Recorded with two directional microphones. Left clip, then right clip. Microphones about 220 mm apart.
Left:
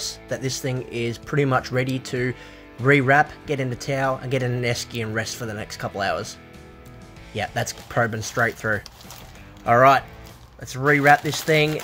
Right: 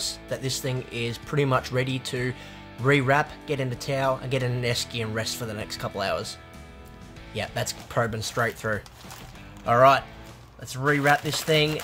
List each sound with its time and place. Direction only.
0.0 s speech: 10° left (ahead or behind)
7.3 s speech: 10° left (ahead or behind)